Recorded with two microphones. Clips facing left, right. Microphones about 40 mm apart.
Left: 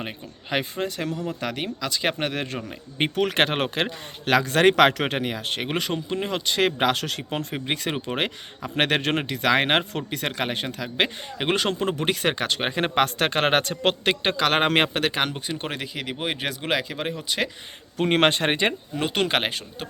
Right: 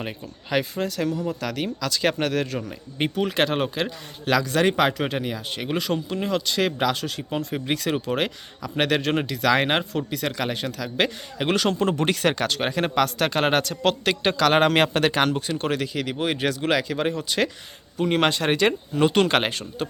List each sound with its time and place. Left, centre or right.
0.5 s speech: left
1.6 s speech: centre
3.2 s speech: left
5.9 s speech: left
6.9 s speech: left
7.3 s speech: left
11.8 s speech: centre
12.9 s speech: left
14.0 s speech: left
14.9 s speech: centre
17.9 s speech: left
18.9 s speech: centre